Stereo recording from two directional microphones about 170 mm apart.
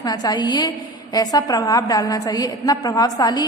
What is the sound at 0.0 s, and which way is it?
A woman's voice, 25° left (ahead or behind).